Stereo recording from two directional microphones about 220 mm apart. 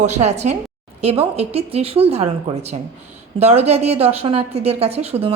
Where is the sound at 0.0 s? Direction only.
30° right (ahead or behind).